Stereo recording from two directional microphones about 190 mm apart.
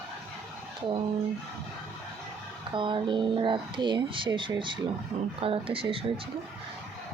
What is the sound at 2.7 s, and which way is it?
Speech, 25° right (ahead or behind).